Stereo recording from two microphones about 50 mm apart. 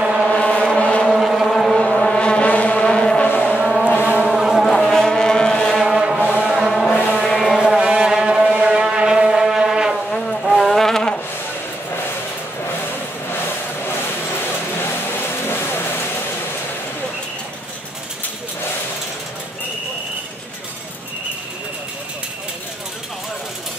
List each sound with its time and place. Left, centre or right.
0.0 s vehicle: centre
0.4 s vehicle: left
1.0 s vehicle: centre; by 2.8 s left
2.8 s a sound: centre
3.3 s a sound: left
3.5 s vehicle: centre
4.6 s foghorn: centre
5.8 s a sound: centre
10.4 s insect: centre
14.8 s vehicle: left